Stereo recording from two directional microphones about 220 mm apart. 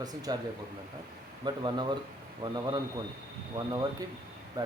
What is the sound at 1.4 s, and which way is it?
Speech, 20° right (ahead or behind).